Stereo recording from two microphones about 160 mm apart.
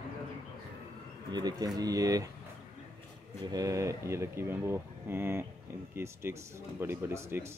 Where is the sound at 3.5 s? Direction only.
20° right (ahead or behind).